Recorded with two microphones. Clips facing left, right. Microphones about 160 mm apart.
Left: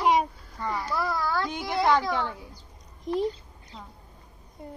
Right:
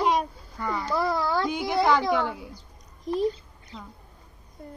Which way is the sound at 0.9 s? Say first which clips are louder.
Right 4 dB; 20° right (ahead or behind).